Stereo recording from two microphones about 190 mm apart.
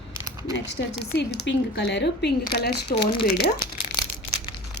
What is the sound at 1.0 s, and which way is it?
Speech, 60° left (ahead or behind).